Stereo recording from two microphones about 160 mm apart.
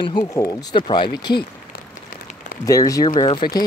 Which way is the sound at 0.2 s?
20° left (ahead or behind).